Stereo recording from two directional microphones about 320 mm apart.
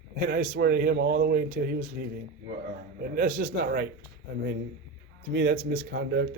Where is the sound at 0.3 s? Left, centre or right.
Right.